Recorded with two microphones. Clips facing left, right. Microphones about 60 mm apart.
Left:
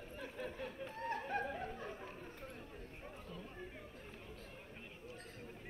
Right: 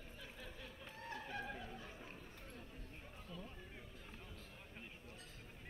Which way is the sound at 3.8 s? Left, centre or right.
Left.